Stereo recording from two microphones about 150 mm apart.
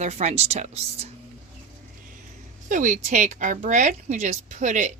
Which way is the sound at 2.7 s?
55° right (ahead or behind).